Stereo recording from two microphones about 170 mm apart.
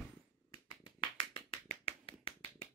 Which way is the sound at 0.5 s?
25° left (ahead or behind).